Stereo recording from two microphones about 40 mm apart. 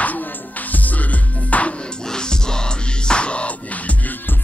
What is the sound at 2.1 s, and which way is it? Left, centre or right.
Music, centre.